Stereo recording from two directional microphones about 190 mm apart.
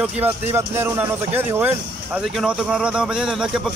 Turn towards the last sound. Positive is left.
turn(degrees=-5)  # may be behind; listen again after turning